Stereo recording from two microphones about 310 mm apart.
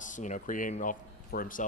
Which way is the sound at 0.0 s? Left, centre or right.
Left.